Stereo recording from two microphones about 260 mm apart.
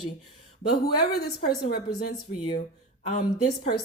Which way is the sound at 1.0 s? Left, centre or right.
Left.